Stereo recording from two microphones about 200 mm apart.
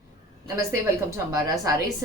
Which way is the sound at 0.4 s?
15° right (ahead or behind).